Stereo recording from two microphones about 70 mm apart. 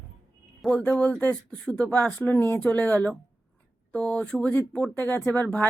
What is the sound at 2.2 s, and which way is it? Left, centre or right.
A man's voice, left.